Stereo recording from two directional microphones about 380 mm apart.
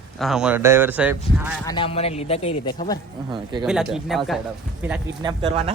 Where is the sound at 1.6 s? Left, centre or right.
Centre.